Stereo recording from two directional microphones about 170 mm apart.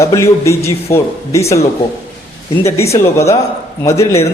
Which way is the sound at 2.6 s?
15° left (ahead or behind).